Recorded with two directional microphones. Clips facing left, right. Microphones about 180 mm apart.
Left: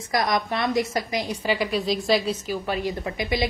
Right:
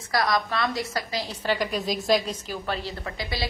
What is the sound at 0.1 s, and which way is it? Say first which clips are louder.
A woman's voice: left 1 dB; 20° left (ahead or behind).